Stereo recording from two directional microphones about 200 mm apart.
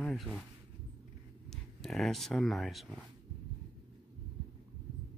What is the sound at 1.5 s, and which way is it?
Speech, centre (ahead or behind).